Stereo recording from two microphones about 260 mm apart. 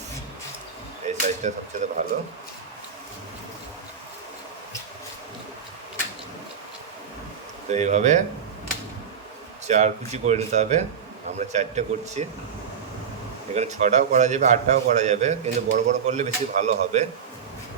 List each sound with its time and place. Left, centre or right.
1.0 s speech: right
7.7 s a man's voice: right
9.6 s a man's voice: right
13.5 s a man's voice: right